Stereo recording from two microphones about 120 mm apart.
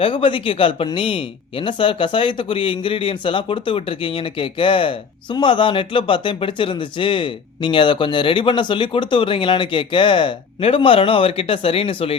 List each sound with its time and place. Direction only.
0.0 s speech: 45° left (ahead or behind)